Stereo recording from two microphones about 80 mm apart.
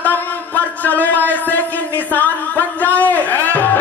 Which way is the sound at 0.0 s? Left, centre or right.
Left.